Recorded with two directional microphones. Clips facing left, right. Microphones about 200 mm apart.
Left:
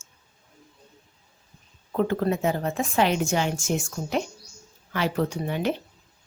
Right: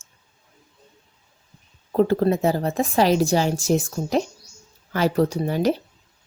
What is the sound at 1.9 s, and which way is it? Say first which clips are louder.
A woman's voice: right 5 dB; 35° right (ahead or behind).